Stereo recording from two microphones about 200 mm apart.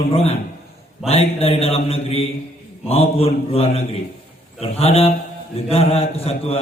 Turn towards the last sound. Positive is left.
turn(degrees=30)  # may be behind; listen again after turning